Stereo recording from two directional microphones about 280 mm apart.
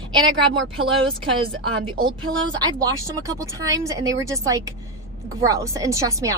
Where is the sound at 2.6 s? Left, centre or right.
Centre.